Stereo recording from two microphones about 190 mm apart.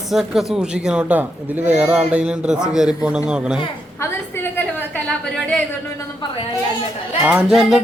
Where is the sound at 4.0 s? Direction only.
10° left (ahead or behind).